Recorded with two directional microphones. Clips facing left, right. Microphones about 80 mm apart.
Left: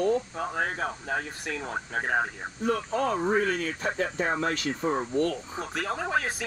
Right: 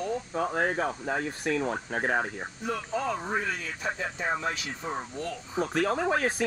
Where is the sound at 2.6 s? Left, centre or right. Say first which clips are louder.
Left 4 dB; left.